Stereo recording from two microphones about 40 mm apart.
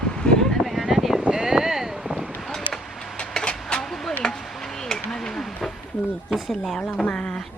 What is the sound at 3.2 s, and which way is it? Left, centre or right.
Vehicle, left.